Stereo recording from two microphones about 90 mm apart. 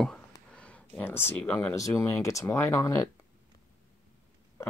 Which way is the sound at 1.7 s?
35° left (ahead or behind).